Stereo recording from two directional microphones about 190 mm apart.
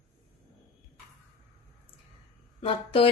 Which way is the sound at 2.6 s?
30° left (ahead or behind).